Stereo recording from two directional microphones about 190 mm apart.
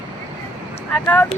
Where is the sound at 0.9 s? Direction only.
5° left (ahead or behind).